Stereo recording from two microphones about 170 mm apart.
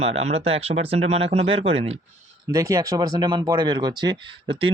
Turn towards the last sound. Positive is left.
turn(degrees=-30)  # may be behind; listen again after turning